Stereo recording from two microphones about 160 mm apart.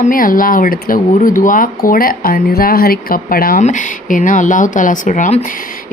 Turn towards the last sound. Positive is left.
turn(degrees=50)  # may be behind; listen again after turning